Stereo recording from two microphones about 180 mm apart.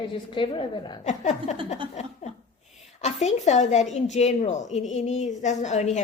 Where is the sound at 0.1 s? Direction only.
30° left (ahead or behind).